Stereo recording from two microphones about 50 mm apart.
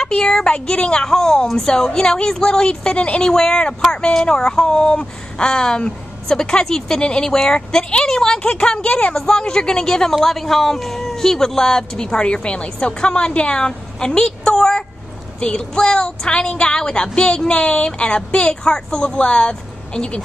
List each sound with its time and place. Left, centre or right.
0.0 s speech: centre